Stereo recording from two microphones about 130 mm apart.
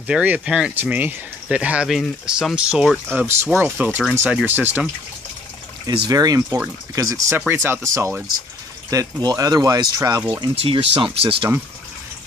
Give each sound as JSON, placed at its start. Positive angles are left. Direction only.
{"t": 0.0, "sound": "speech", "side_deg": -10}
{"t": 5.9, "sound": "speech", "side_deg": -30}
{"t": 7.3, "sound": "speech", "side_deg": -15}
{"t": 10.5, "sound": "speech", "side_deg": -50}